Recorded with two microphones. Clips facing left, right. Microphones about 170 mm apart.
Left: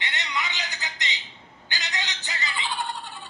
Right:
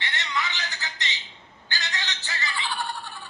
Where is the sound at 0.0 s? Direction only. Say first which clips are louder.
Right 1 dB; 20° left (ahead or behind).